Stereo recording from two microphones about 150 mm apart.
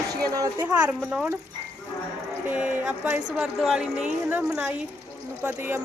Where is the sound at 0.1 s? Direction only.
25° right (ahead or behind).